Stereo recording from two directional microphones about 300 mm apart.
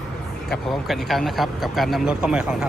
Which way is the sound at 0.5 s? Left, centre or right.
Centre.